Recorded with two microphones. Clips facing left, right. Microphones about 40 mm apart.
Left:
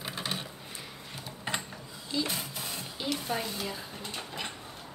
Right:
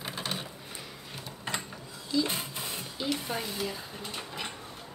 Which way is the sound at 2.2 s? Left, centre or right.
Right.